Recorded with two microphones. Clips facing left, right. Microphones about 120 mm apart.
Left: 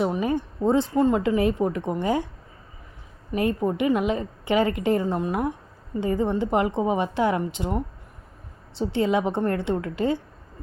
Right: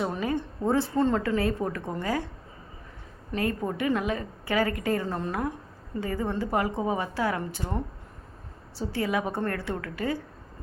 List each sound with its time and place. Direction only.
0.0 s a woman's voice: 20° left (ahead or behind)
3.3 s a woman's voice: 20° left (ahead or behind)